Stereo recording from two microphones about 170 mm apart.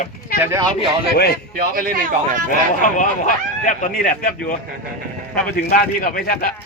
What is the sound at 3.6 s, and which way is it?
Speech, 50° left (ahead or behind).